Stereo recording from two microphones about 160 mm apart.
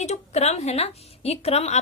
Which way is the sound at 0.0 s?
45° left (ahead or behind).